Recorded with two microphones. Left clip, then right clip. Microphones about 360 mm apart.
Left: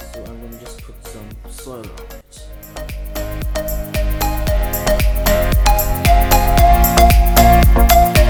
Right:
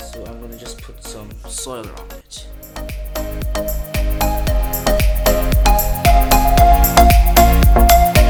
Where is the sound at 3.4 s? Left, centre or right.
Centre.